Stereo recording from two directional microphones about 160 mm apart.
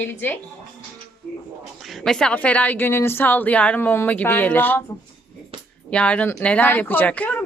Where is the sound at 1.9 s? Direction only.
Centre (ahead or behind).